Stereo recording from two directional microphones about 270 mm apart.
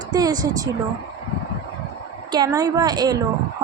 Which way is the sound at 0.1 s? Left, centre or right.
Centre.